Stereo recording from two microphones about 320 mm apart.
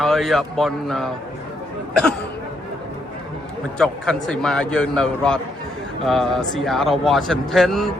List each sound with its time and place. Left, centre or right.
0.0 s a man's voice: centre
3.8 s a man's voice: centre